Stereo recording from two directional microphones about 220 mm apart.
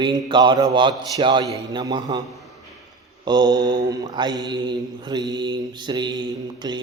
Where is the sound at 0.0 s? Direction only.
20° right (ahead or behind).